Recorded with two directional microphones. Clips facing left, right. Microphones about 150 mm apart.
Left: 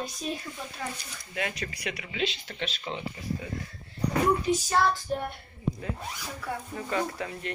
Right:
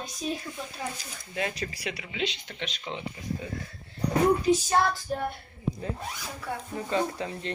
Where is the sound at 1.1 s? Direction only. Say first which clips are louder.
Right 2 dB; 30° right (ahead or behind).